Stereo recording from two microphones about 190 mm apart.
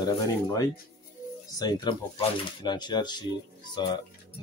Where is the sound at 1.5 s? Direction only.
20° left (ahead or behind).